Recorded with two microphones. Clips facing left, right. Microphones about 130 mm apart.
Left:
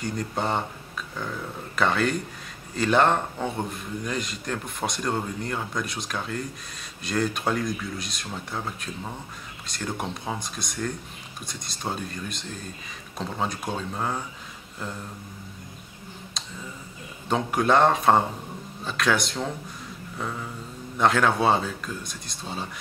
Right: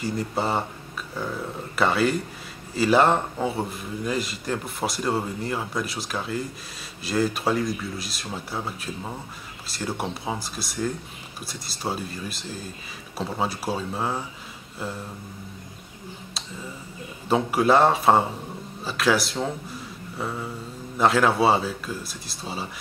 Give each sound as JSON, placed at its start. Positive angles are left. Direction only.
{"t": 0.0, "sound": "speech", "side_deg": -5}
{"t": 17.3, "sound": "speech", "side_deg": -5}
{"t": 20.2, "sound": "a sound", "side_deg": -5}
{"t": 21.0, "sound": "speech", "side_deg": -5}